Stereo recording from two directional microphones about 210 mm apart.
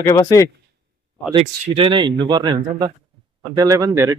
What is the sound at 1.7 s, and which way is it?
Speech, 25° right (ahead or behind).